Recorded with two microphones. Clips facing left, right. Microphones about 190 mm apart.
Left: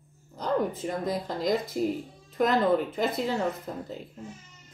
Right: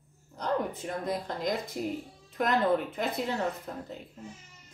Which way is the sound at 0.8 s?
Centre (ahead or behind).